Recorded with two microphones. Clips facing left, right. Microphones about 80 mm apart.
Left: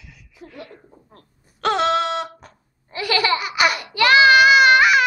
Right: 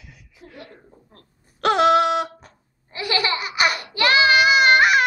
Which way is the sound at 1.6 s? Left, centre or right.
Centre.